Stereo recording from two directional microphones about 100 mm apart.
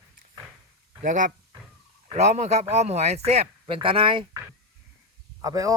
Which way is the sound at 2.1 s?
90° right.